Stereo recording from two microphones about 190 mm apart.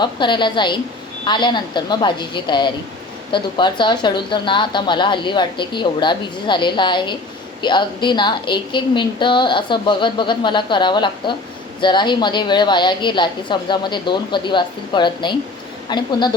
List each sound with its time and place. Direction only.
0.0 s a woman's voice: 25° left (ahead or behind)